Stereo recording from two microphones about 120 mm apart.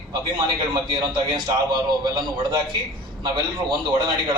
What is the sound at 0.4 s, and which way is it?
A man's voice, 40° right (ahead or behind).